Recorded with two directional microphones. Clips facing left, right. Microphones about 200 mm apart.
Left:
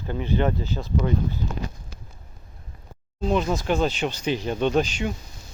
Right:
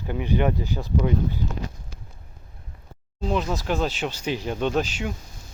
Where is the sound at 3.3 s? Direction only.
Centre (ahead or behind).